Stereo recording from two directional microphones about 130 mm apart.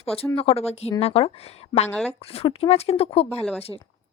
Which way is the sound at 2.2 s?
50° left (ahead or behind).